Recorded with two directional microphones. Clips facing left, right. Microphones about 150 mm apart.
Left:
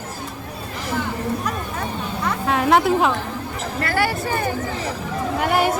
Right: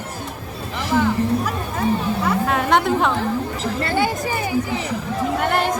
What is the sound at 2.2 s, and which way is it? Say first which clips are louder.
Chatter: left 2 dB; centre (ahead or behind).